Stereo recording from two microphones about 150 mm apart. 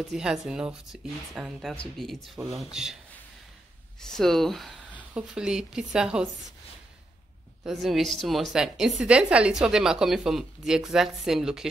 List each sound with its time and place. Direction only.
0.1 s a woman's voice: 5° right (ahead or behind)
4.0 s a woman's voice: 5° left (ahead or behind)
7.6 s a woman's voice: centre (ahead or behind)